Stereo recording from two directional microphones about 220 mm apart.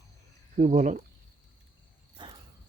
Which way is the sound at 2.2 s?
20° right (ahead or behind).